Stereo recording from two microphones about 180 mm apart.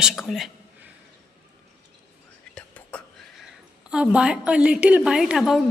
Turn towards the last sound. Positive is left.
turn(degrees=0)  # may be behind; listen again after turning